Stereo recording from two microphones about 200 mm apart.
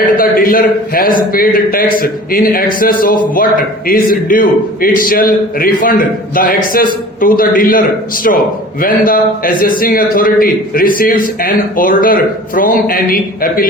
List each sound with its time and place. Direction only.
0.2 s a man's voice: 45° left (ahead or behind)